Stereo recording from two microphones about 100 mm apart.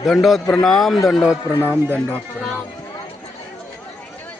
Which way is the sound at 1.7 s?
20° right (ahead or behind).